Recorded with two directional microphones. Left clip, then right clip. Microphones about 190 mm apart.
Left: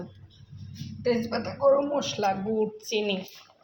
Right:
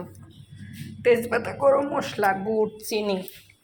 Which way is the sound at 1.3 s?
25° right (ahead or behind).